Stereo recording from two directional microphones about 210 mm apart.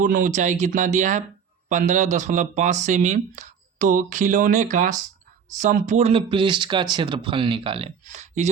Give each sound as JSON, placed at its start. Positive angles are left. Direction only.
{"t": 0.0, "sound": "speech", "side_deg": -35}